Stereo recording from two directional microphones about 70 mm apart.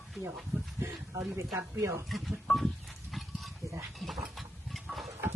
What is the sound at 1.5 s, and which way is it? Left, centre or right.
Speech, right.